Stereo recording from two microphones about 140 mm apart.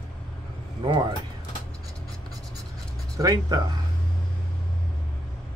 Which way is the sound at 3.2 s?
25° right (ahead or behind).